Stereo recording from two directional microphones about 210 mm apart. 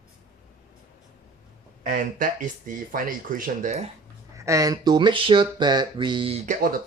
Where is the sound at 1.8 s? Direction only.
40° right (ahead or behind).